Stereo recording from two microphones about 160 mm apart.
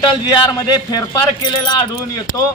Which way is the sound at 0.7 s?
25° left (ahead or behind).